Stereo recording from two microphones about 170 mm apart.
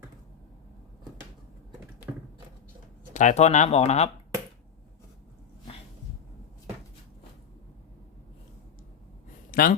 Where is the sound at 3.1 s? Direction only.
45° left (ahead or behind).